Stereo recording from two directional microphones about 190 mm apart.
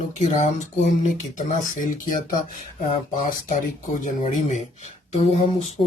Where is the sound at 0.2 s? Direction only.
40° left (ahead or behind).